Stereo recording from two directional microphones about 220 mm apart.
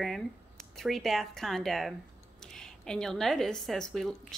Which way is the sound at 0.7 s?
Centre (ahead or behind).